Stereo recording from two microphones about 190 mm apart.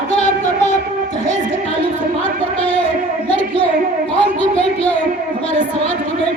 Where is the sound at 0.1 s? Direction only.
35° left (ahead or behind).